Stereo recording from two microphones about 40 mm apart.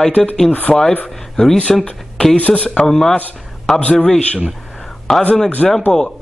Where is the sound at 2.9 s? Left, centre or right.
Centre.